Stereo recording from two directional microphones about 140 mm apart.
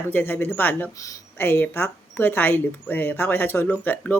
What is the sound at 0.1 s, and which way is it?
Speech, 15° left (ahead or behind).